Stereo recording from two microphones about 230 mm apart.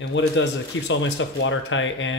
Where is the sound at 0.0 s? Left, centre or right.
Left.